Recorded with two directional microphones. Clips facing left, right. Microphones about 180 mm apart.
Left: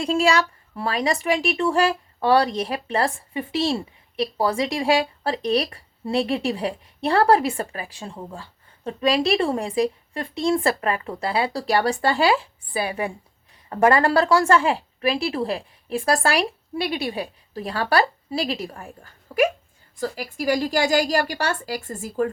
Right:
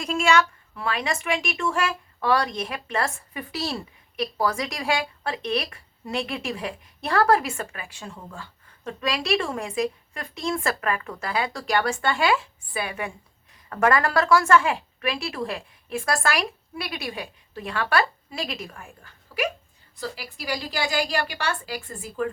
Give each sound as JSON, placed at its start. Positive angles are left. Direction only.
{"t": 0.0, "sound": "speech", "side_deg": 30}